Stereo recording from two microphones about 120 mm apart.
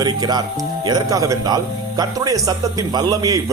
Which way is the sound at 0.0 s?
35° right (ahead or behind).